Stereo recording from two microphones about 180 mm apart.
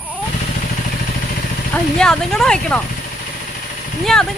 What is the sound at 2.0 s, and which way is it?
Speech, 5° left (ahead or behind).